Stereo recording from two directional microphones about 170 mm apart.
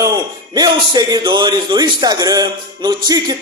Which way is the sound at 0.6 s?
25° right (ahead or behind).